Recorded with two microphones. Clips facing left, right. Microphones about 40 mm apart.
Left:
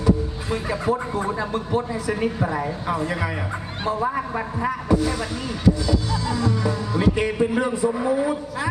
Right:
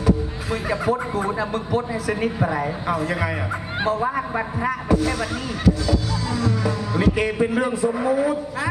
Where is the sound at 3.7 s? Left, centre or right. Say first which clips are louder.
Right 2 dB; centre.